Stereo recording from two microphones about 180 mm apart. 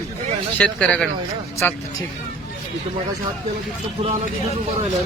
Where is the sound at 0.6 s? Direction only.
5° left (ahead or behind).